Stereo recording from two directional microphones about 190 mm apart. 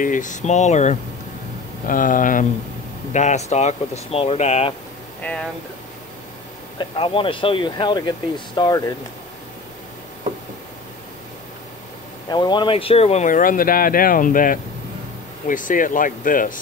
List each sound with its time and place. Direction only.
0.0 s speech: 40° left (ahead or behind)
5.2 s speech: 5° left (ahead or behind)
6.8 s speech: 30° left (ahead or behind)
12.3 s speech: 25° left (ahead or behind); by 16.5 s 45° left (ahead or behind)